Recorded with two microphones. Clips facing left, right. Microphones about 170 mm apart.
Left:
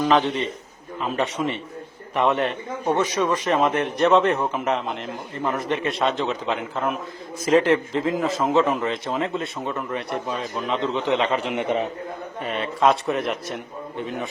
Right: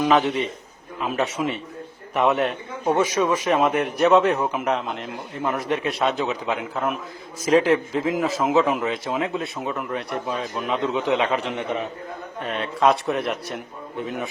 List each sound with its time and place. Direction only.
0.0 s a man's voice: 5° right (ahead or behind)
11.5 s a man's voice: 20° left (ahead or behind)
12.4 s a man's voice: centre (ahead or behind)